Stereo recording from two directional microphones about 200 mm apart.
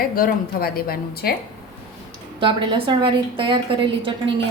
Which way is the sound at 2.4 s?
25° right (ahead or behind).